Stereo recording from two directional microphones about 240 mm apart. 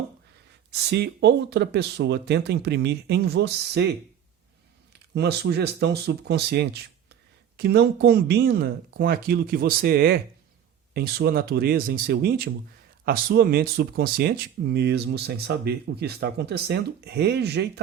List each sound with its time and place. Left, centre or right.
0.7 s speech: right
5.1 s speech: right